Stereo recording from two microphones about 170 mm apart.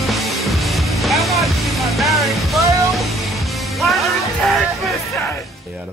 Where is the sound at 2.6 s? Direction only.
20° right (ahead or behind).